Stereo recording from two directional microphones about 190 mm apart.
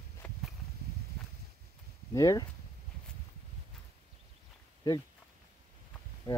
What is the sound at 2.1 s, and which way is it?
Speech, 20° left (ahead or behind).